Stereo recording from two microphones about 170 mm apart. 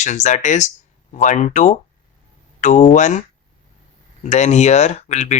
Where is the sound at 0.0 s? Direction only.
45° left (ahead or behind).